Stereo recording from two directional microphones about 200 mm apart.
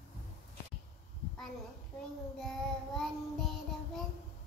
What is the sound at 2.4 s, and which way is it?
Child singing, centre (ahead or behind).